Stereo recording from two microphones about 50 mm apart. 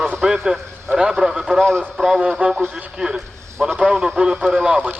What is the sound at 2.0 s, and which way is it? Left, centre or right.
Speech, centre.